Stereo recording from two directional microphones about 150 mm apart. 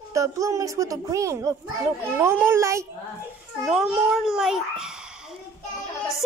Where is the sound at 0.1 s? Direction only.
20° right (ahead or behind).